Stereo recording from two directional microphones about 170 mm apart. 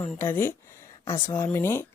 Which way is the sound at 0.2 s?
15° left (ahead or behind).